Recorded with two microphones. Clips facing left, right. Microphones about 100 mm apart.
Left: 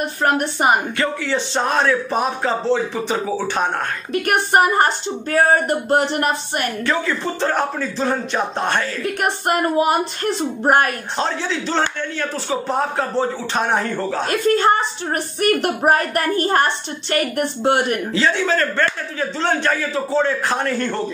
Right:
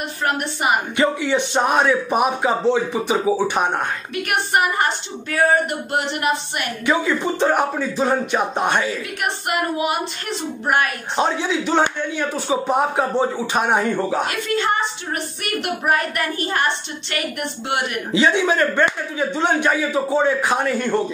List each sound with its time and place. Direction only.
0.2 s a woman's voice: 40° left (ahead or behind)
0.9 s a man's voice: 15° right (ahead or behind)
4.1 s a woman's voice: 40° left (ahead or behind)
6.9 s a man's voice: 15° right (ahead or behind)
9.2 s a woman's voice: 40° left (ahead or behind)
11.1 s a man's voice: 15° right (ahead or behind)
14.3 s a woman's voice: 40° left (ahead or behind)
18.1 s a man's voice: 15° right (ahead or behind)